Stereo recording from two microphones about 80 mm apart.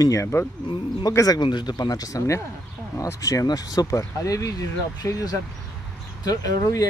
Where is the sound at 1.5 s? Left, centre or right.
Left.